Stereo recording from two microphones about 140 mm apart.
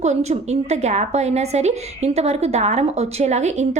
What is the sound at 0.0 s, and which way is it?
A woman's voice, 55° right (ahead or behind).